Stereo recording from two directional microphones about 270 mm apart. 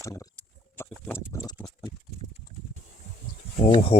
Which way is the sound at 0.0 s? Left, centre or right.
Centre.